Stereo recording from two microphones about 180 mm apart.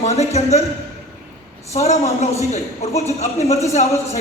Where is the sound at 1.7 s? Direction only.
35° left (ahead or behind).